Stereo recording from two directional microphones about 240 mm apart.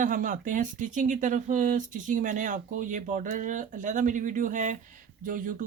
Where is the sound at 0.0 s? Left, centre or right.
Right.